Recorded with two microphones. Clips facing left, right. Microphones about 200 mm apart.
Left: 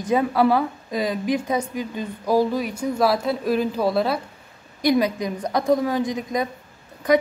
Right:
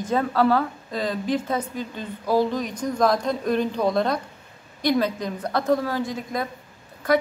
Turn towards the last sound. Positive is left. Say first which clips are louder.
# left 2 dB
turn(degrees=15)  # may be behind; listen again after turning